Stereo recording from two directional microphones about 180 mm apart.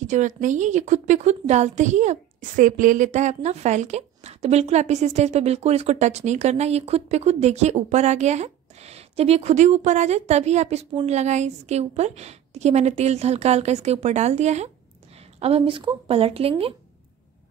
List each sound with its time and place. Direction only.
0.0 s a woman's voice: 45° right (ahead or behind)